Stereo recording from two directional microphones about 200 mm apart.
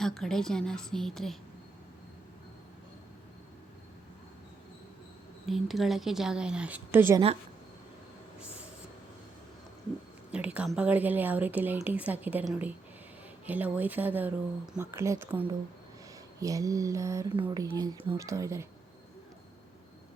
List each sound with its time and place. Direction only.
0.0 s a woman's voice: 5° left (ahead or behind)
5.5 s a woman's voice: centre (ahead or behind)
10.3 s a woman's voice: 5° right (ahead or behind)